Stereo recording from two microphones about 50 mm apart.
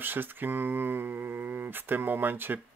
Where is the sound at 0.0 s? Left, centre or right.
Right.